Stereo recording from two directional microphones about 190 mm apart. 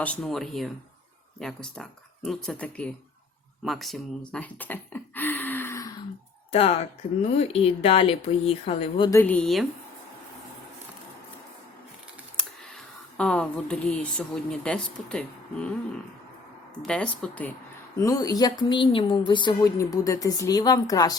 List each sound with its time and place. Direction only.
0.0 s speech: 5° left (ahead or behind)
6.5 s speech: 30° left (ahead or behind)
9.0 s speech: 10° left (ahead or behind)
12.4 s speech: 5° left (ahead or behind)
16.8 s speech: 5° left (ahead or behind)
17.9 s speech: 20° left (ahead or behind)